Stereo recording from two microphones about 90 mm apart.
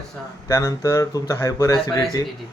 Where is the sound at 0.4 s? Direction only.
40° left (ahead or behind).